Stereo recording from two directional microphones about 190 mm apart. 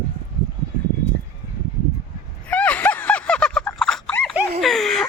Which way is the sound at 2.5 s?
5° left (ahead or behind).